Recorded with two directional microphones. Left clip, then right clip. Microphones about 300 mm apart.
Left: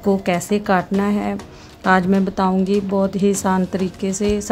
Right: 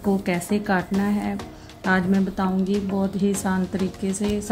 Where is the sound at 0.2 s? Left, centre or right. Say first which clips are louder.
Left 6 dB; left.